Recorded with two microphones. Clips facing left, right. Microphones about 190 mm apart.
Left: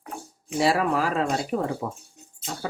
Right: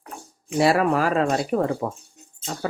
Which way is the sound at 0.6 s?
60° right (ahead or behind).